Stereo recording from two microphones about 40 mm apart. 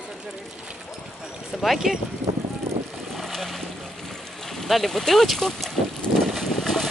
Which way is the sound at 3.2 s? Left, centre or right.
Centre.